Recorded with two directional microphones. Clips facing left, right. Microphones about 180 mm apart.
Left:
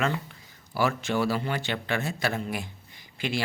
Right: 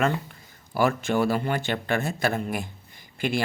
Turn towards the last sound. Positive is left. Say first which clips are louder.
# right 4 dB
turn(degrees=-50)  # may be behind; listen again after turning